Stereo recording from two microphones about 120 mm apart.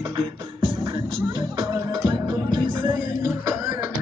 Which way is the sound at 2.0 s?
40° right (ahead or behind).